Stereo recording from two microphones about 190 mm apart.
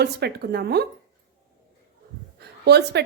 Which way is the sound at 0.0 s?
60° right (ahead or behind).